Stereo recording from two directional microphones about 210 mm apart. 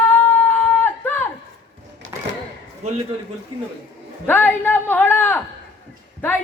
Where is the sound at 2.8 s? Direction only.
30° right (ahead or behind).